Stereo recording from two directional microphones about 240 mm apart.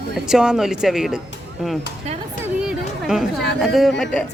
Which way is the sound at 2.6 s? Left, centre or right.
Centre.